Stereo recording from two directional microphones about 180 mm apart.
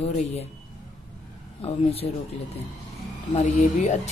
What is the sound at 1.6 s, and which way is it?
Speech, 35° left (ahead or behind).